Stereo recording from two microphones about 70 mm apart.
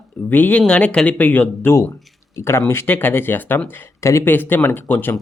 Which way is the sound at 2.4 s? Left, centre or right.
Left.